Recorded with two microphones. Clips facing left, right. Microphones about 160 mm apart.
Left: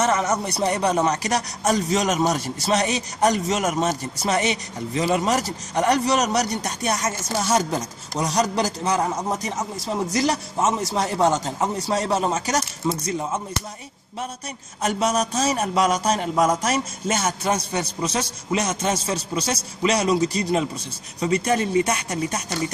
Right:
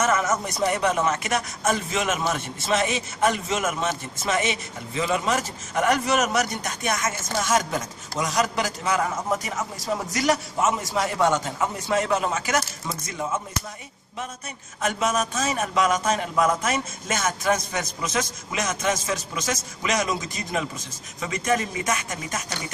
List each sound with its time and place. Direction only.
0.0 s a man's voice: 30° left (ahead or behind)
14.8 s a man's voice: 35° left (ahead or behind)